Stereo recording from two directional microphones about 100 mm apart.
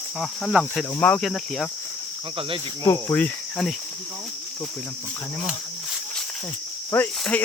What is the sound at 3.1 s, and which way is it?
Cricket, 15° left (ahead or behind).